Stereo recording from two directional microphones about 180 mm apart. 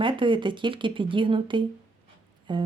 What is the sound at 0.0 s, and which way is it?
Speech, 25° right (ahead or behind).